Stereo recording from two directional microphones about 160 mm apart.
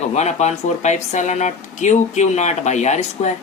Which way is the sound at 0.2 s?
45° left (ahead or behind).